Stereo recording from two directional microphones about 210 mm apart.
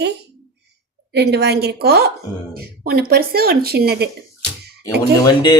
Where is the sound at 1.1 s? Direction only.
50° right (ahead or behind).